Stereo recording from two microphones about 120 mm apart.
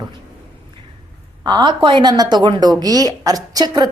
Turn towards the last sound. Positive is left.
turn(degrees=-30)  # may be behind; listen again after turning